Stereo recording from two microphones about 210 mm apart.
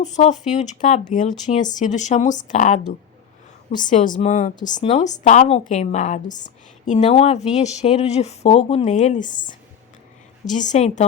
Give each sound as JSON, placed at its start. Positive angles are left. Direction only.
{"t": 0.0, "sound": "speech", "side_deg": 35}
{"t": 3.8, "sound": "speech", "side_deg": 40}
{"t": 4.6, "sound": "a woman's voice", "side_deg": 20}
{"t": 4.9, "sound": "speech", "side_deg": 35}